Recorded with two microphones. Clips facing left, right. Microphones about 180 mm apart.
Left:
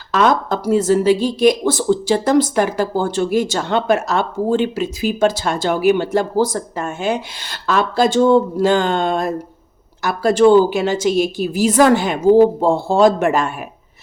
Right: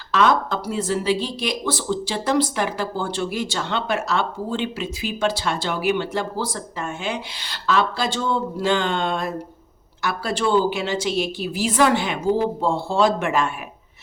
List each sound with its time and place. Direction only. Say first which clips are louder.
0.1 s speech: left 3 dB; 45° left (ahead or behind)